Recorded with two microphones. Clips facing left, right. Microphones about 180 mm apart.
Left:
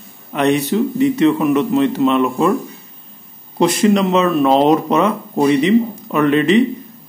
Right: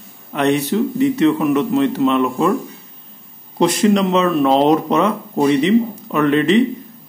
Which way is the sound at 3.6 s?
5° left (ahead or behind).